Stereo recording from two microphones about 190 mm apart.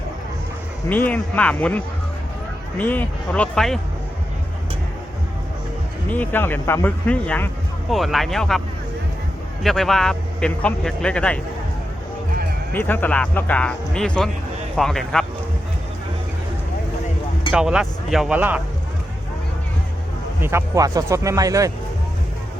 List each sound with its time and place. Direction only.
0.9 s a man's voice: 10° left (ahead or behind)
6.1 s speech: 10° left (ahead or behind)
9.6 s a man's voice: centre (ahead or behind)
12.7 s a man's voice: 10° left (ahead or behind)
17.5 s a man's voice: 5° right (ahead or behind)
20.4 s speech: 15° right (ahead or behind)